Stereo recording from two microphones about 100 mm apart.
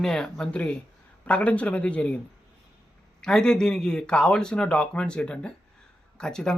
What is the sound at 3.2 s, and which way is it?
Speech, 5° left (ahead or behind).